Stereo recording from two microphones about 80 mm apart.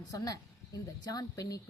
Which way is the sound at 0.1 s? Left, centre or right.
Left.